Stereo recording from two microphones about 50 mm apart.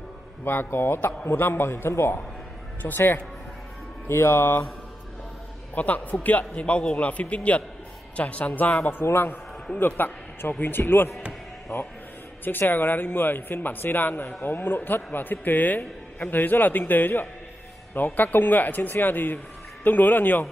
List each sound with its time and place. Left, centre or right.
0.5 s a man's voice: left
4.1 s a man's voice: left
5.8 s a man's voice: left
9.0 s a man's voice: left